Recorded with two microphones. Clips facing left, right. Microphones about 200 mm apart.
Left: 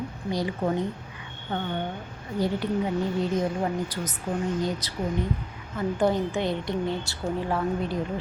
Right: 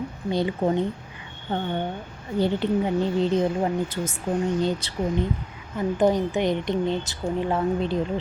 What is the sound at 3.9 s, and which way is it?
A woman's voice, 25° right (ahead or behind).